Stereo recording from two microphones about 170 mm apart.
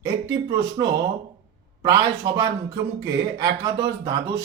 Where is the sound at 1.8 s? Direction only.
25° right (ahead or behind).